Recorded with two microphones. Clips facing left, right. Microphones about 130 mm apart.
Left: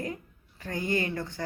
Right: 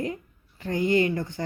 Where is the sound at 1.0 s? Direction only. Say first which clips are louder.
Right 5 dB; 15° right (ahead or behind).